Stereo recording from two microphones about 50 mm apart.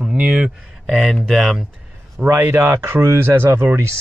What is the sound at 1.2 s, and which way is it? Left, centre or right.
Speech, centre.